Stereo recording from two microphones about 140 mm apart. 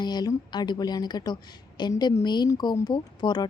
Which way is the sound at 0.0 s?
30° left (ahead or behind).